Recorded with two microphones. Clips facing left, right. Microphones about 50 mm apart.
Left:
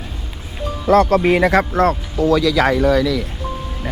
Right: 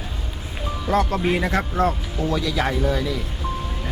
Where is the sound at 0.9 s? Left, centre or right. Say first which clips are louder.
Left 8 dB; left.